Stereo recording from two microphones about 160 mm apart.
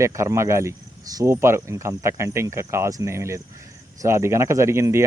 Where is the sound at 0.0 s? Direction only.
20° right (ahead or behind).